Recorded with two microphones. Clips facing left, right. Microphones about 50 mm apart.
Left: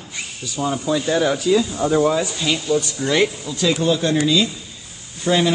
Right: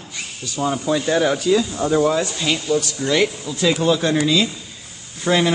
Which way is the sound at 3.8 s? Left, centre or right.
Right.